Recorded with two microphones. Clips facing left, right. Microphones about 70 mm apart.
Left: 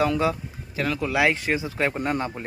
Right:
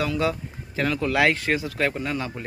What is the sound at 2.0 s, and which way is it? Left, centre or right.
Speech, left.